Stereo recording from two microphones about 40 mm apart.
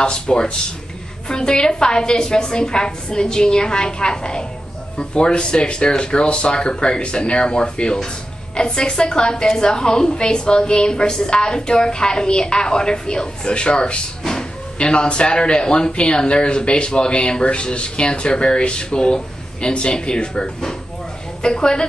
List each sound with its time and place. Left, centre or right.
0.0 s a woman's voice: left